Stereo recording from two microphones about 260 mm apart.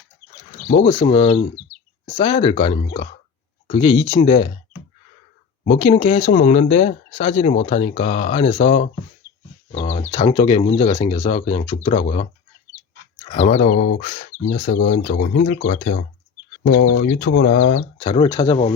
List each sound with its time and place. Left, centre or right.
0.7 s speech: left
5.6 s speech: left
13.6 s speech: left
18.0 s speech: left